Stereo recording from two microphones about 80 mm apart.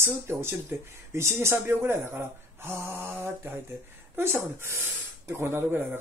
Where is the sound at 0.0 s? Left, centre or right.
Right.